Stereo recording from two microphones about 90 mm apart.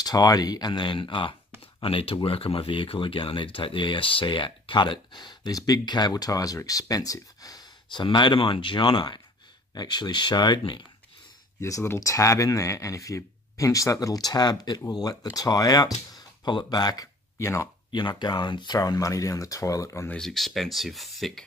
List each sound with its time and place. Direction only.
0.0 s speech: 45° left (ahead or behind); by 1.3 s 65° left (ahead or behind)
1.8 s speech: 90° left; by 7.6 s 40° left (ahead or behind)
7.9 s speech: 60° left (ahead or behind)
11.6 s speech: 30° left (ahead or behind)
17.4 s speech: 30° left (ahead or behind)
17.9 s speech: 60° left (ahead or behind)
18.8 s speech: 40° left (ahead or behind)
20.2 s speech: 5° left (ahead or behind)